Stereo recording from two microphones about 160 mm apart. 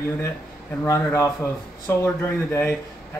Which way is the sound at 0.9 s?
15° left (ahead or behind).